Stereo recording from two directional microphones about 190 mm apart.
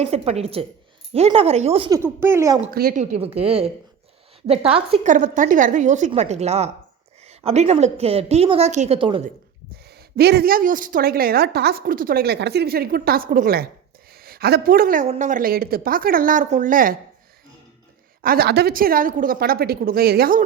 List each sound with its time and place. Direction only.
0.0 s a woman's voice: 35° right (ahead or behind)
1.9 s speech: 15° right (ahead or behind)
2.6 s a woman's voice: 50° right (ahead or behind); by 5.1 s 30° right (ahead or behind)
5.1 s a woman's voice: 45° right (ahead or behind); by 9.2 s 25° right (ahead or behind)
10.2 s a woman's voice: 55° right (ahead or behind)
18.2 s a woman's voice: 50° right (ahead or behind)